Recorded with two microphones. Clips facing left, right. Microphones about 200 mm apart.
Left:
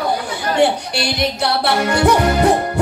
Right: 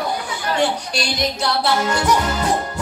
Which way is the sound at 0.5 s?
60° left (ahead or behind).